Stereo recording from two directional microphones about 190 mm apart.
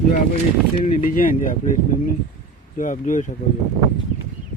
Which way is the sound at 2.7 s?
45° left (ahead or behind).